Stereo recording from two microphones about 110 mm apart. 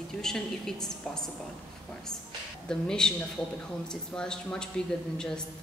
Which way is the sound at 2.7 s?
5° left (ahead or behind).